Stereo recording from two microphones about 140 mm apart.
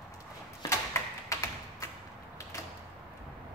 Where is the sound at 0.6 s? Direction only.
20° left (ahead or behind).